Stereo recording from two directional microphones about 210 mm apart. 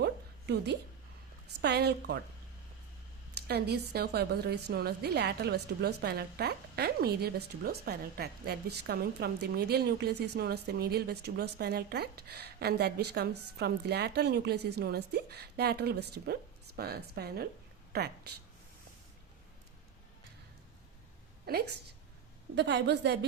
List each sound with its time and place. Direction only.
0.0 s a sound: 50° right (ahead or behind)
1.6 s a woman's voice: 55° right (ahead or behind)
3.4 s a woman's voice: 50° right (ahead or behind)
21.4 s a woman's voice: 50° right (ahead or behind)